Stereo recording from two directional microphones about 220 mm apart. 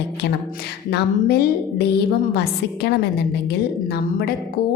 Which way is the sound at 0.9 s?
45° left (ahead or behind).